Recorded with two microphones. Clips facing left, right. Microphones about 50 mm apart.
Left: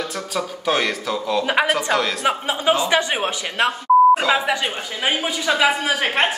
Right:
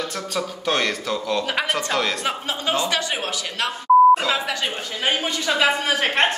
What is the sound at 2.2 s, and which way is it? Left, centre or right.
Speech, centre.